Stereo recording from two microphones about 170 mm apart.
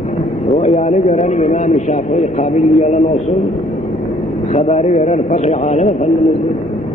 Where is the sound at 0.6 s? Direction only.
40° left (ahead or behind).